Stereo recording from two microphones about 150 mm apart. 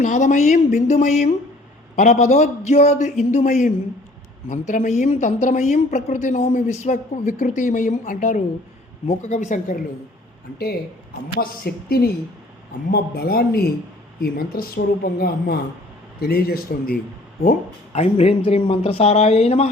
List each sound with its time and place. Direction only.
0.0 s a woman's voice: 55° left (ahead or behind)
9.0 s a woman's voice: 50° left (ahead or behind)
11.3 s speech: 90° left
17.9 s speech: 45° left (ahead or behind)